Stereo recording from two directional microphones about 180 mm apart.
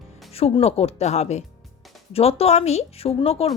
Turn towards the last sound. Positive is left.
turn(degrees=35)  # may be behind; listen again after turning